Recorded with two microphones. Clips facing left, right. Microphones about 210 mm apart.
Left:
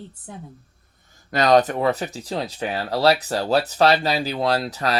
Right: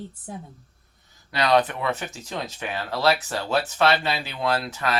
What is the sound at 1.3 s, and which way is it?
Speech, 45° left (ahead or behind).